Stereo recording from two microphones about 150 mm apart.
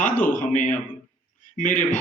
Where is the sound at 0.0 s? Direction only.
60° left (ahead or behind).